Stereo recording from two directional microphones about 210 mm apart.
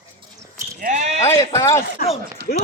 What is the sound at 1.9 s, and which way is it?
Speech, 30° left (ahead or behind).